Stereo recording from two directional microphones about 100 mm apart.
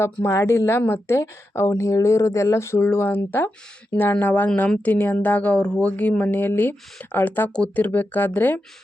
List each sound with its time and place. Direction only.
0.0 s speech: 30° left (ahead or behind)